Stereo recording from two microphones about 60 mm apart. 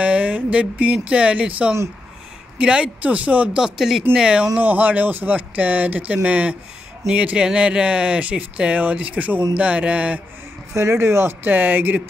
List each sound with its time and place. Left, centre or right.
0.0 s speech: right
3.6 s speech: centre
4.6 s speech: right
10.7 s speech: right
11.4 s speech: right